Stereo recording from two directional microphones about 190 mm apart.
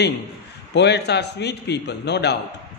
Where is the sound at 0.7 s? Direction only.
60° left (ahead or behind).